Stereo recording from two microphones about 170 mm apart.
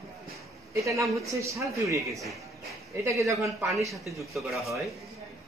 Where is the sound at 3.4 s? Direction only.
Centre (ahead or behind).